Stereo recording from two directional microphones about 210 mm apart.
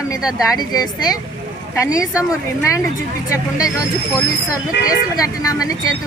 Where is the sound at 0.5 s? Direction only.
20° left (ahead or behind).